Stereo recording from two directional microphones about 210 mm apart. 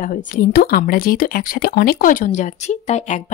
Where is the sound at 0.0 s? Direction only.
40° left (ahead or behind).